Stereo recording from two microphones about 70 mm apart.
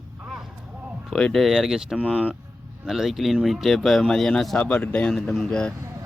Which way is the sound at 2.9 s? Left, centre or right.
Centre.